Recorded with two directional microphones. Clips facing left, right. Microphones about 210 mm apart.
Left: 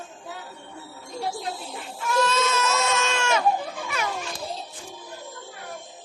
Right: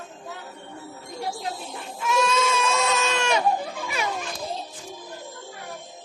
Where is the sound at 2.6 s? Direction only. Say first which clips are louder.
Right 1 dB; 30° right (ahead or behind).